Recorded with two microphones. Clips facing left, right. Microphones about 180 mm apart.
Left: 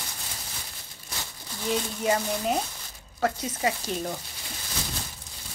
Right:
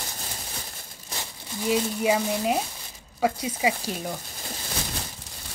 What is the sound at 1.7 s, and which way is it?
Speech, 5° right (ahead or behind).